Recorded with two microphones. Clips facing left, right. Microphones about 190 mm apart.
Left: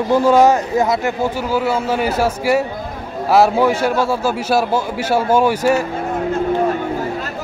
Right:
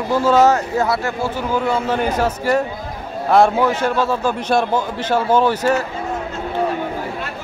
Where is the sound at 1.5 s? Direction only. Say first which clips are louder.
Right 1 dB; 5° left (ahead or behind).